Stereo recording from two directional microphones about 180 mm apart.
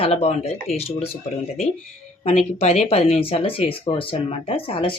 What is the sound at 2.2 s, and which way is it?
A woman's voice, 35° left (ahead or behind).